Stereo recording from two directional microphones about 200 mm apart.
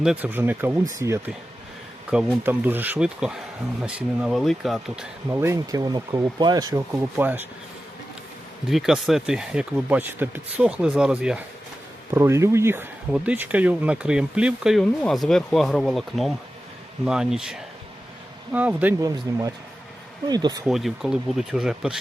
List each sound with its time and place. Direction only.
0.0 s speech: 5° right (ahead or behind)
5.3 s speech: 15° right (ahead or behind)
8.7 s speech: centre (ahead or behind); by 20.6 s 20° right (ahead or behind)
20.7 s speech: centre (ahead or behind)